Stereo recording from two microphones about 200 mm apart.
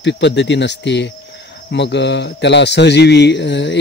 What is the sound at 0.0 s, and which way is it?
Speech, 60° left (ahead or behind).